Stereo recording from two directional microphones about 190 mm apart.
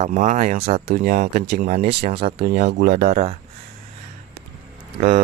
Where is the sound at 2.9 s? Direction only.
40° right (ahead or behind).